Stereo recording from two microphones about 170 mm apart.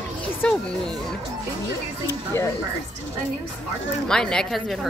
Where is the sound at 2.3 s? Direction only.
15° left (ahead or behind).